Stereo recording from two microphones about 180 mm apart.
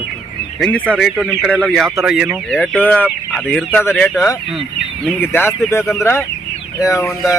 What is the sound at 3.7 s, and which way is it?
Speech, 10° left (ahead or behind).